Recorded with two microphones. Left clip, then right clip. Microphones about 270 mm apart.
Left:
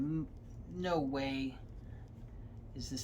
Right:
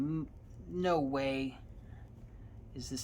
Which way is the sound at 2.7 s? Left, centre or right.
Centre.